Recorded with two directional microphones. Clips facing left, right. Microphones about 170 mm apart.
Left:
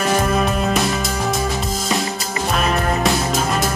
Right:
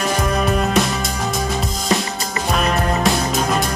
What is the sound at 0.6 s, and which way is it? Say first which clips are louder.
Music: right 1 dB; centre (ahead or behind).